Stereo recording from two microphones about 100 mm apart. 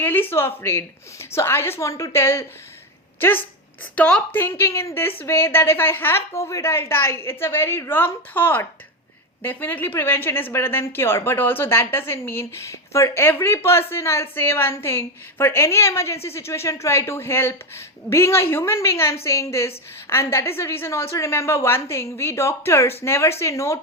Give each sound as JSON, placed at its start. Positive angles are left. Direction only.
{"t": 0.0, "sound": "a woman's voice", "side_deg": 20}
{"t": 3.9, "sound": "a woman's voice", "side_deg": 10}
{"t": 4.4, "sound": "a woman's voice", "side_deg": 20}